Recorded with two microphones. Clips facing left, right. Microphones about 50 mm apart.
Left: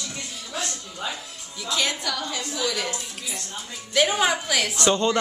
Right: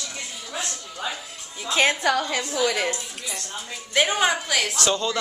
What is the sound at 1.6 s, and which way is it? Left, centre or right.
A woman's voice, right.